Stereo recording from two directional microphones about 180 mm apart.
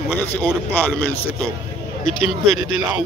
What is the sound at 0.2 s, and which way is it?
Speech, 10° left (ahead or behind).